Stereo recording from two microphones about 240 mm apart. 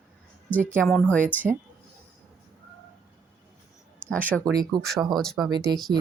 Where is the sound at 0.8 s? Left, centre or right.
Centre.